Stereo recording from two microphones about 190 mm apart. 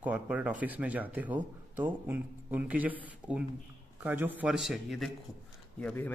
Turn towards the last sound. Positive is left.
turn(degrees=10)  # may be behind; listen again after turning